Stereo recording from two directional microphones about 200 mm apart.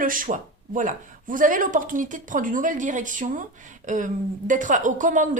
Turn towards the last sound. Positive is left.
turn(degrees=-40)  # may be behind; listen again after turning